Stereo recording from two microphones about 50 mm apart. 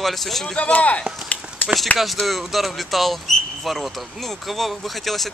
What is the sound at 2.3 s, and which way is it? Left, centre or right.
Speech, centre.